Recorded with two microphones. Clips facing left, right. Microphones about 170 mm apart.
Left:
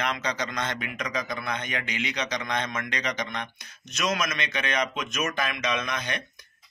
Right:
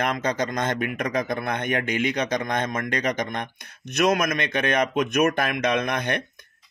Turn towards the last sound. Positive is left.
turn(degrees=-55)  # may be behind; listen again after turning